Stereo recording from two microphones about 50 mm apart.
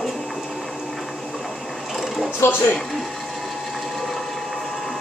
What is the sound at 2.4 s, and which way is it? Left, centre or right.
Speech, left.